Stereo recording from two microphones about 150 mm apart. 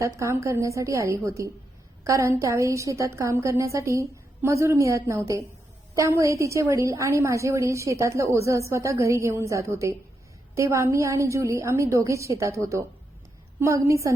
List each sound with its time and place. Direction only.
0.2 s a woman's voice: 20° right (ahead or behind)